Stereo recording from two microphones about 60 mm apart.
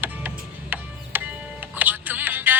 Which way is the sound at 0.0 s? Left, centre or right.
Right.